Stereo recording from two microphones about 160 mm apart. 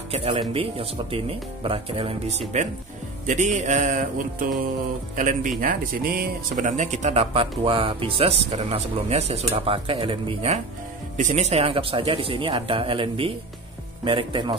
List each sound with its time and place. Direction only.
0.1 s speech: 35° right (ahead or behind)
3.3 s music: 50° right (ahead or behind)
5.6 s speech: 60° right (ahead or behind); by 10.6 s 35° right (ahead or behind)
11.1 s speech: 50° right (ahead or behind); by 14.6 s 30° right (ahead or behind)